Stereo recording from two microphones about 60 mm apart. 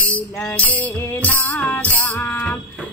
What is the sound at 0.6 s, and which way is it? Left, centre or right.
Music, left.